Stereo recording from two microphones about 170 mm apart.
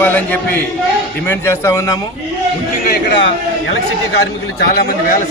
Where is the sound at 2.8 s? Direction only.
80° left.